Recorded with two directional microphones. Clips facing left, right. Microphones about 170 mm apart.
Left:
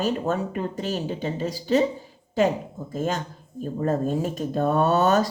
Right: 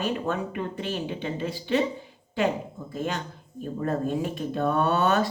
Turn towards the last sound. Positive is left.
turn(degrees=40)  # may be behind; listen again after turning